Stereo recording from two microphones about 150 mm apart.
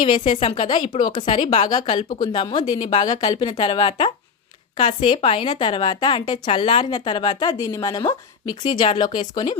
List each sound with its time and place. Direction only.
0.0 s a woman's voice: 35° left (ahead or behind)